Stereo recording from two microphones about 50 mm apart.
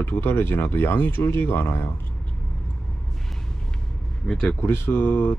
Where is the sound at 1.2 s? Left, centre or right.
Left.